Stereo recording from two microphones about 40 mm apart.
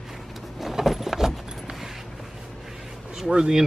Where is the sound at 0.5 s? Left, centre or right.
Centre.